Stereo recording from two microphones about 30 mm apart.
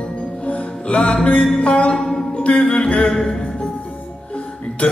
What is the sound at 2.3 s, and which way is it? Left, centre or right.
Music, left.